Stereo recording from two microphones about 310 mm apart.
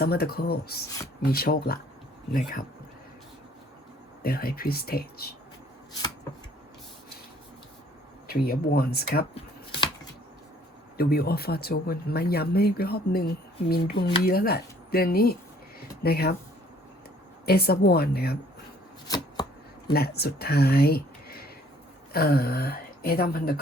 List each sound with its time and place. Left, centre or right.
0.0 s speech: left
4.2 s speech: left
8.3 s speech: left
10.9 s speech: left
15.8 s a sound: left
17.4 s a woman's voice: left
19.0 s chopping: centre
19.9 s speech: left